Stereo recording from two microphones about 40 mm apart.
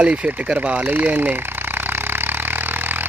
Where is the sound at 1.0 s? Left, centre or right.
Right.